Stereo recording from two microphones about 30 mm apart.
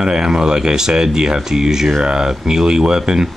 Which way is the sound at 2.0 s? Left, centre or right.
Right.